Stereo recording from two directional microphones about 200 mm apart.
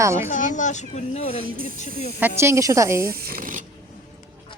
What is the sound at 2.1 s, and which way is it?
Speech, 10° right (ahead or behind).